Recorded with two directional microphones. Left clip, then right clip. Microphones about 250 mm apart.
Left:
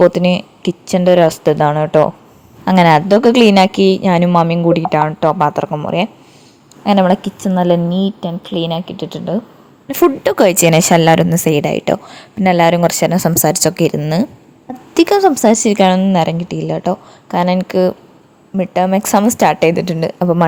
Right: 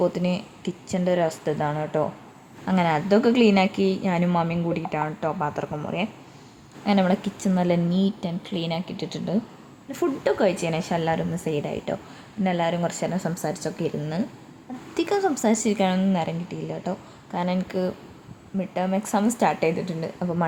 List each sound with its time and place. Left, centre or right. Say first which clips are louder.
0.0 s a woman's voice: left 14 dB; left
9.9 s a woman's voice: left 11 dB; left